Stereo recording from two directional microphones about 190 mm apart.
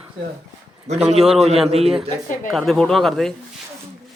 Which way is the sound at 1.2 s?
Centre (ahead or behind).